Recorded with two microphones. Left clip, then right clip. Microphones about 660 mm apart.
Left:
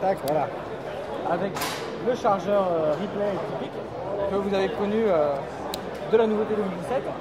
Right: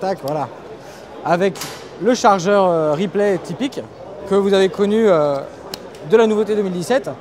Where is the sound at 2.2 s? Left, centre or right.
Right.